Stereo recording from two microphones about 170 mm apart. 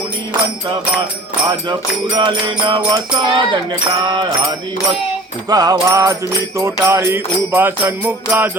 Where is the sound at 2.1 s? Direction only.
30° right (ahead or behind).